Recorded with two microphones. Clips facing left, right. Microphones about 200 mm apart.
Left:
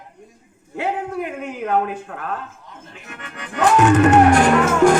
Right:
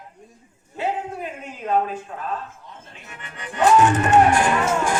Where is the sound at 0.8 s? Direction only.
80° left.